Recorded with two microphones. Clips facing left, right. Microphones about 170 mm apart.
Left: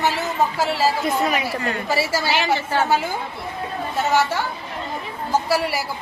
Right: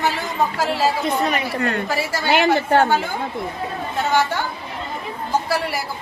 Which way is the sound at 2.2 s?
55° right (ahead or behind).